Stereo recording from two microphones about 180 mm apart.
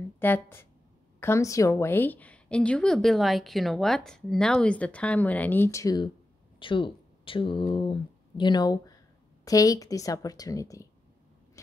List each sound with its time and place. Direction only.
0.2 s a woman's voice: 10° left (ahead or behind)